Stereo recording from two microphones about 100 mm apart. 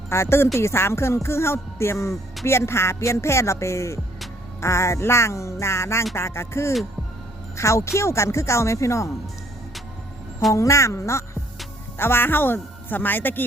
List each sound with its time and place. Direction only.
0.1 s speech: 25° left (ahead or behind)
10.5 s speech: 30° left (ahead or behind)